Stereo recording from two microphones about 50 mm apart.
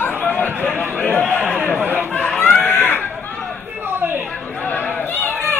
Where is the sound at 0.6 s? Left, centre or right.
Left.